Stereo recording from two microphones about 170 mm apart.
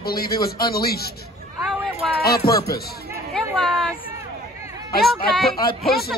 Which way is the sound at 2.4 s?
65° left (ahead or behind).